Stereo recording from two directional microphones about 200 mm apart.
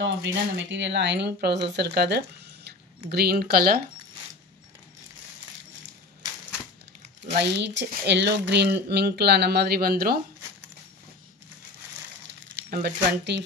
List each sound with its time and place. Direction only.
0.0 s speech: 65° right (ahead or behind); by 3.8 s 50° right (ahead or behind)
7.3 s speech: 60° right (ahead or behind)
12.6 s speech: 45° right (ahead or behind)